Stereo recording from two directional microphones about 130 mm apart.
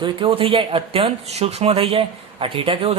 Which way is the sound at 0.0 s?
45° right (ahead or behind).